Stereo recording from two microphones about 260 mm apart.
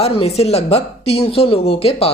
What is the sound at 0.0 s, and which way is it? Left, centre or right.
Speech, left.